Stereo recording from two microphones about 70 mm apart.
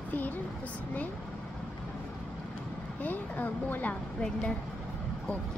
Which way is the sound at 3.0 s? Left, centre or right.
Left.